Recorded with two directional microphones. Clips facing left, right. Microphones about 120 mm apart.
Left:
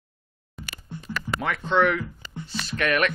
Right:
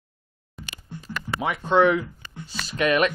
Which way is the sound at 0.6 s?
Centre (ahead or behind).